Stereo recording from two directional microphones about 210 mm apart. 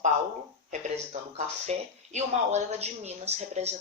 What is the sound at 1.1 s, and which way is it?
Speech, 30° right (ahead or behind).